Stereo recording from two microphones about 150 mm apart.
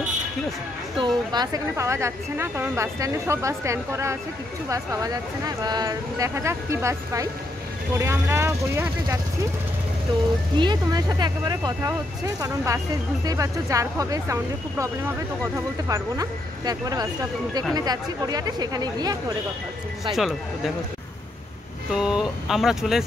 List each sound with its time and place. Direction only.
0.9 s a woman's voice: 30° right (ahead or behind)
10.6 s a woman's voice: 30° right (ahead or behind)
20.2 s speech: centre (ahead or behind)
21.9 s speech: 5° right (ahead or behind)